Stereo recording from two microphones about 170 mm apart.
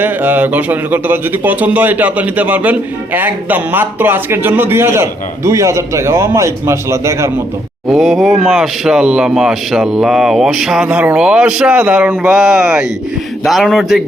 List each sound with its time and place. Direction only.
0.0 s a man's voice: 10° right (ahead or behind)
7.9 s speech: centre (ahead or behind)